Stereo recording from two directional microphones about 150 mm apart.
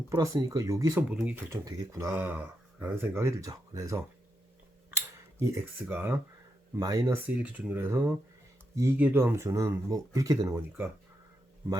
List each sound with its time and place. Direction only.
0.1 s speech: 25° right (ahead or behind)
1.1 s speech: 10° right (ahead or behind)
1.5 s speech: 20° right (ahead or behind)
4.9 s cutlery: 20° right (ahead or behind)
5.8 s speech: 15° right (ahead or behind)
6.7 s speech: 25° right (ahead or behind)
7.3 s speech: 10° right (ahead or behind)